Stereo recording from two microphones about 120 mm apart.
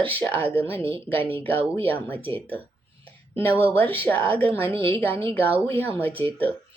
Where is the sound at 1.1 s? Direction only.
15° left (ahead or behind).